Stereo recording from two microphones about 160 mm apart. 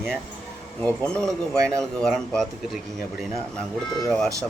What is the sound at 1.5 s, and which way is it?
Speech, 20° right (ahead or behind).